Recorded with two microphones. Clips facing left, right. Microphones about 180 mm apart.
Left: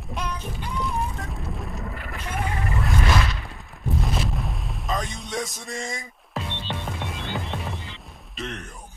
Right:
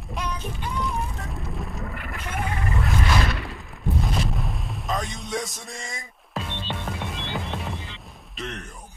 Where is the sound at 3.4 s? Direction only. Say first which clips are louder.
Right 3 dB; centre (ahead or behind).